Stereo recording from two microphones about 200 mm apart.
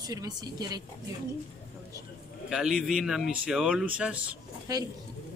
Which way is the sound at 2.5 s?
Centre (ahead or behind).